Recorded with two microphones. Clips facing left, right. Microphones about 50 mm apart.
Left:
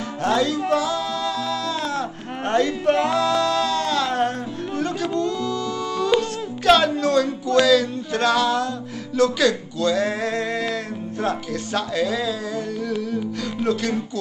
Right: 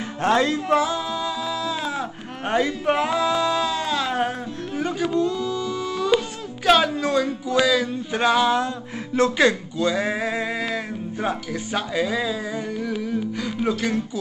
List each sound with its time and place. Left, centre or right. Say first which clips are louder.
0.2 s music: right 1 dB; right; by 4.3 s centre
4.7 s speech: right 1 dB; centre